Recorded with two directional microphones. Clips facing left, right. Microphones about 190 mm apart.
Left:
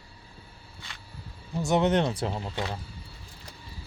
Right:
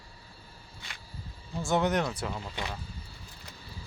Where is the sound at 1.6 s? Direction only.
20° left (ahead or behind).